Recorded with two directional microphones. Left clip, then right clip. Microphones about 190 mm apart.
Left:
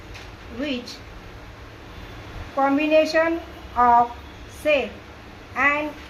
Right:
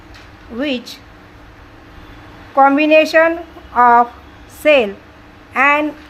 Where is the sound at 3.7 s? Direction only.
40° right (ahead or behind).